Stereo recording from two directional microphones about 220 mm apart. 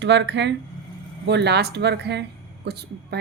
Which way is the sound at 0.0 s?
50° right (ahead or behind).